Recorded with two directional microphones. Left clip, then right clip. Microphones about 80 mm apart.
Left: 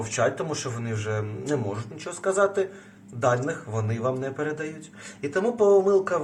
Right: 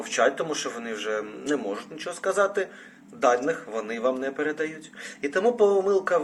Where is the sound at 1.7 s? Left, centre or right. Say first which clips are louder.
Right 2 dB; left.